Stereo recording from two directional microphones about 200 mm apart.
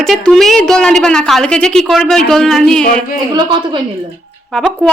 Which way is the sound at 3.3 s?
25° right (ahead or behind).